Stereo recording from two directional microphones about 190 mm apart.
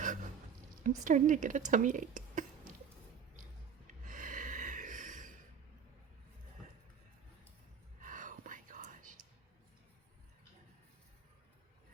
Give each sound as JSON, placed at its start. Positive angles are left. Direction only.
{"t": 0.0, "sound": "a sound", "side_deg": -45}
{"t": 0.9, "sound": "speech", "side_deg": -40}
{"t": 4.0, "sound": "snort", "side_deg": -45}
{"t": 8.0, "sound": "whispering", "side_deg": -45}